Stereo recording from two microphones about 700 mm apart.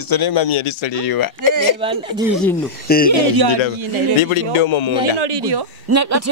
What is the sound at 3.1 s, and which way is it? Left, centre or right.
Speech, right.